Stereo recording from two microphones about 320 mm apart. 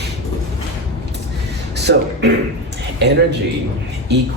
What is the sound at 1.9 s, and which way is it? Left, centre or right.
Speech, right.